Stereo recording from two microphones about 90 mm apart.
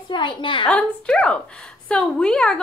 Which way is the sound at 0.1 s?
65° left (ahead or behind).